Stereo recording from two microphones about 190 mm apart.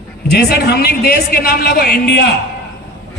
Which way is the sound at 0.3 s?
60° left (ahead or behind).